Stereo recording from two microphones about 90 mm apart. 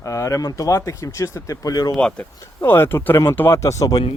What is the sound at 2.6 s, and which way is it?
Speech, 25° left (ahead or behind).